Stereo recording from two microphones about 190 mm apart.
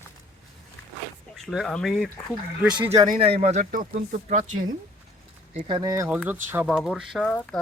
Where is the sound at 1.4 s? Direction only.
Centre (ahead or behind).